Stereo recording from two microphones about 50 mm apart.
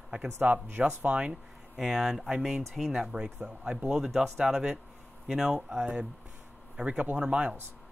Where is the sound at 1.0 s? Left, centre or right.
Right.